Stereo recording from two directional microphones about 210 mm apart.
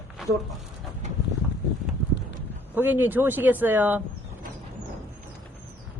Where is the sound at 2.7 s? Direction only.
10° right (ahead or behind).